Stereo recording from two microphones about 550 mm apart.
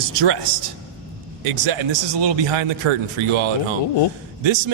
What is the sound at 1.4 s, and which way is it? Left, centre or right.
A man's voice, right.